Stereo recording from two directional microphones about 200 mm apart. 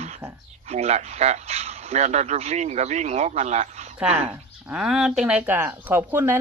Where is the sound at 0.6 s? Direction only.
30° right (ahead or behind).